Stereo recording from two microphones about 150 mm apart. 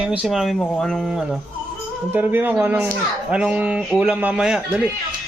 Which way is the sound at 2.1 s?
15° right (ahead or behind).